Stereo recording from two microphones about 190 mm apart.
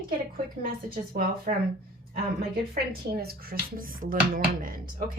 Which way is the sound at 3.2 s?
50° right (ahead or behind).